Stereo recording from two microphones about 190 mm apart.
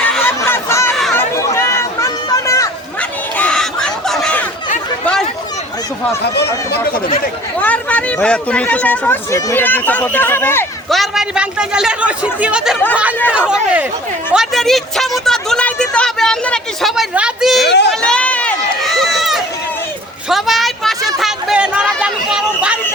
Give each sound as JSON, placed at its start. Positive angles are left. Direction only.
{"t": 0.0, "sound": "a sound", "side_deg": 5}
{"t": 6.3, "sound": "speech", "side_deg": 60}
{"t": 7.6, "sound": "speech", "side_deg": 5}
{"t": 10.8, "sound": "speech", "side_deg": 0}
{"t": 17.6, "sound": "speech", "side_deg": 65}
{"t": 18.0, "sound": "run", "side_deg": 5}
{"t": 20.3, "sound": "a sound", "side_deg": 0}